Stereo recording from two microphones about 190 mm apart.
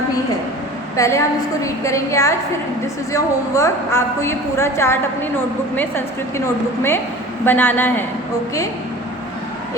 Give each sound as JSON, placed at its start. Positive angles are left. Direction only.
{"t": 0.9, "sound": "a woman's voice", "side_deg": 15}
{"t": 6.3, "sound": "a woman's voice", "side_deg": 15}